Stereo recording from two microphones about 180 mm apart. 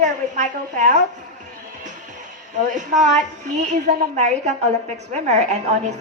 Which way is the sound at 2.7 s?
45° right (ahead or behind).